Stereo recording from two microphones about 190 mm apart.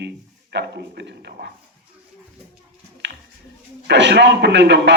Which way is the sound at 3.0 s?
65° right (ahead or behind).